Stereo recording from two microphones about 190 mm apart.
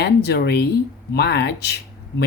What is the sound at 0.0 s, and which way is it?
A woman's voice, 60° left (ahead or behind).